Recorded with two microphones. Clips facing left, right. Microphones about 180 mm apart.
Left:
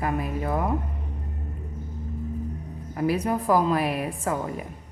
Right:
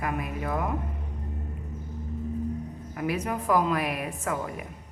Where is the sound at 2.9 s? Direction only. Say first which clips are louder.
Left 5 dB; 35° left (ahead or behind).